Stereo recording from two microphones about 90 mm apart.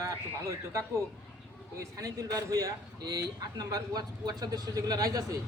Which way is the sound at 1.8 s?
40° right (ahead or behind).